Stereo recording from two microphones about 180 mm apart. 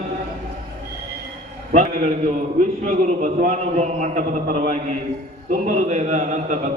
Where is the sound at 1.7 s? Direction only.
45° right (ahead or behind).